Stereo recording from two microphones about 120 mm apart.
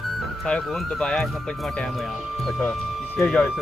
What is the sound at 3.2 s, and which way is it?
Speech, 5° left (ahead or behind).